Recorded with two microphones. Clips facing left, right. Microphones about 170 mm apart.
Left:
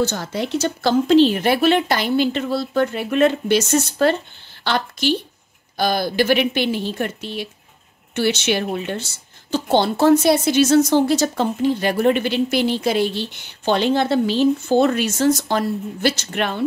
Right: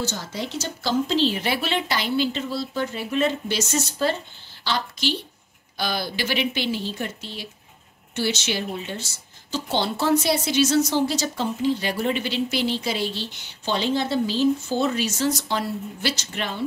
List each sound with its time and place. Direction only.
0.0 s a woman's voice: 60° left (ahead or behind)
5.8 s a woman's voice: 50° left (ahead or behind)